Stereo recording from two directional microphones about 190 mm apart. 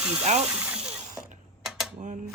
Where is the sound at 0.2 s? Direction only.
35° right (ahead or behind).